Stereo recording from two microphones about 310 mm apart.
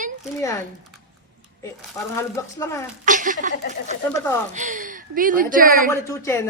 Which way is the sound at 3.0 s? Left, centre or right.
Right.